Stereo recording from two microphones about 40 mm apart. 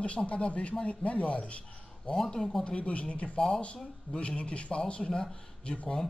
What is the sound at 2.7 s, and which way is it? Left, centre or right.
Speech, left.